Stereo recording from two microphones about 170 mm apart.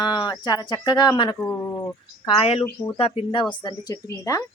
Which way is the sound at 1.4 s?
10° left (ahead or behind).